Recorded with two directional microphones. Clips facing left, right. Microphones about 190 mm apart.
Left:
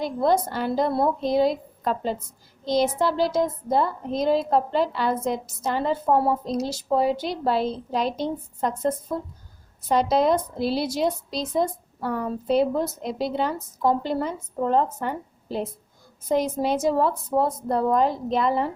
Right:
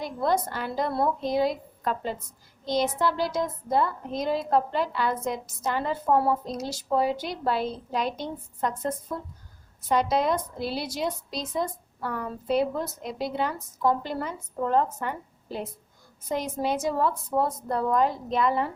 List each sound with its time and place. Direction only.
0.0 s a woman's voice: 30° left (ahead or behind)